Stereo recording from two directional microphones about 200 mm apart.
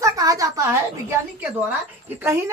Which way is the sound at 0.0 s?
15° right (ahead or behind).